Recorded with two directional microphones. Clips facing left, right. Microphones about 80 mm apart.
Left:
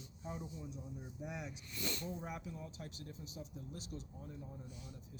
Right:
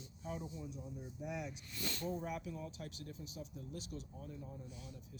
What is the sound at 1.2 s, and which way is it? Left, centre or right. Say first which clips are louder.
Speech: right 3 dB; left.